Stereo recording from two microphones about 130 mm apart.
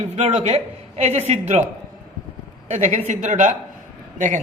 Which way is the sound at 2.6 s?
65° right (ahead or behind).